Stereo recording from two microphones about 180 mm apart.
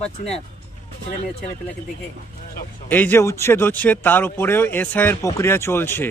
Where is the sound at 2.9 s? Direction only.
10° left (ahead or behind).